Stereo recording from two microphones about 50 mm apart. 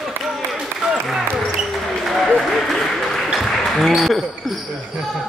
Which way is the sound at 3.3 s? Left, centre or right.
Centre.